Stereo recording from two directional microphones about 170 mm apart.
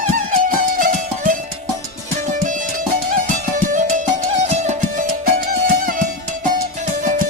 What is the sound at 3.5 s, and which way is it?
Music, 50° right (ahead or behind).